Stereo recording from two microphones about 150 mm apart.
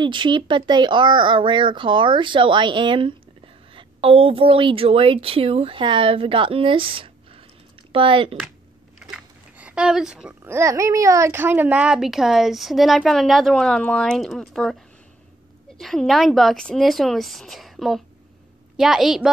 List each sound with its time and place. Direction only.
0.0 s a woman's voice: 30° right (ahead or behind)
9.1 s a sound: 10° right (ahead or behind)
10.5 s speech: 20° right (ahead or behind); by 14.8 s centre (ahead or behind)
15.8 s speech: centre (ahead or behind)